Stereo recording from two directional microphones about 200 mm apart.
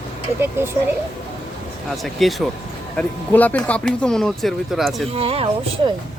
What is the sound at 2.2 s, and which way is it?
Speech, centre (ahead or behind).